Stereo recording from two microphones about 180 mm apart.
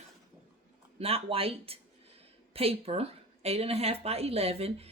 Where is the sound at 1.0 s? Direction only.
35° right (ahead or behind).